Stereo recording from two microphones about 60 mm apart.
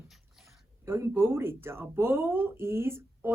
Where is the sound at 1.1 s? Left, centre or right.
Right.